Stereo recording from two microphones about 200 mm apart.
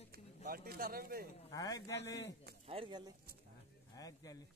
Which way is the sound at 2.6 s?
25° right (ahead or behind).